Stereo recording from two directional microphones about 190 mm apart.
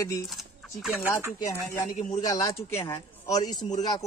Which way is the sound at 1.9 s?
40° left (ahead or behind).